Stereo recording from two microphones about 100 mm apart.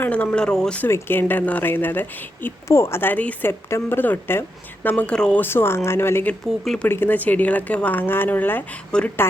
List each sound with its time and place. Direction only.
0.0 s a woman's voice: 15° left (ahead or behind)
0.9 s a woman's voice: 25° left (ahead or behind)
5.4 s a woman's voice: 25° left (ahead or behind)